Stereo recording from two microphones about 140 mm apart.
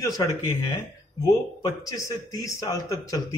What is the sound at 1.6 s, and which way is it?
A man's voice, 25° left (ahead or behind).